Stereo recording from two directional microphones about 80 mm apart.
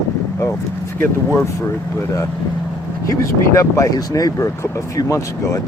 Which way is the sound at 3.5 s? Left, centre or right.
Left.